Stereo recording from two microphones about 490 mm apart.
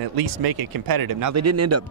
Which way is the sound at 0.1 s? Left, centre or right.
Right.